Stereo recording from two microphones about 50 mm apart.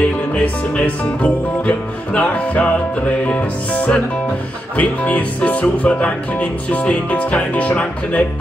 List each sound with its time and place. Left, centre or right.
0.3 s music: left
3.3 s speech: left